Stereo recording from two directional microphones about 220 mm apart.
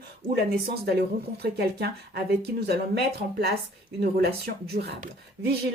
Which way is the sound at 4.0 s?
45° right (ahead or behind).